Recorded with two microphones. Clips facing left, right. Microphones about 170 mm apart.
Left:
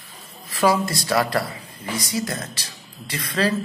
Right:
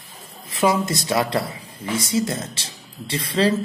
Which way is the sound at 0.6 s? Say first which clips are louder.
Even; 20° right (ahead or behind).